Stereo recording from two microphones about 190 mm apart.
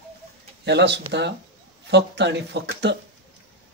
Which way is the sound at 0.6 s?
65° right (ahead or behind).